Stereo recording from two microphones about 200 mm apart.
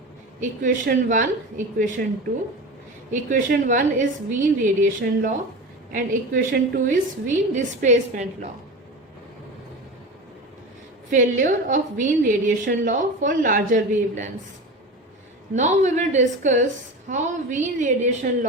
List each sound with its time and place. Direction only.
0.3 s a woman's voice: 40° right (ahead or behind)
3.1 s a woman's voice: 40° right (ahead or behind)
11.1 s a woman's voice: 40° right (ahead or behind)
15.5 s a woman's voice: 35° right (ahead or behind)